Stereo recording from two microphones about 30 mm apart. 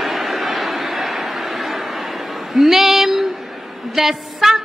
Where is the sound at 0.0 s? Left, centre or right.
Centre.